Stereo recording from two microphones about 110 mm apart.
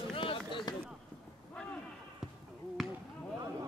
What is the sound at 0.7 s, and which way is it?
Chop, 40° left (ahead or behind).